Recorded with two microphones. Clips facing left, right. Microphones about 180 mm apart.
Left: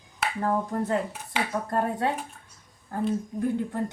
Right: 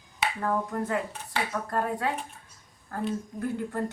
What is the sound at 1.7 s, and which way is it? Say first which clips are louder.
Speech: left 2 dB; 25° left (ahead or behind).